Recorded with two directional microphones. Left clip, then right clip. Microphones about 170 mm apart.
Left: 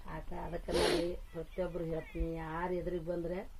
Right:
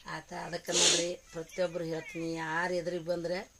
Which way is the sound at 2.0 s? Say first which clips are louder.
Right 4 dB; 20° right (ahead or behind).